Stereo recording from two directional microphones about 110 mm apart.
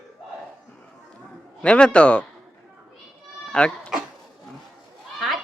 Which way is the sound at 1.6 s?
10° left (ahead or behind).